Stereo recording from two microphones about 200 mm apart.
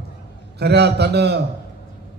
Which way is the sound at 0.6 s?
55° right (ahead or behind).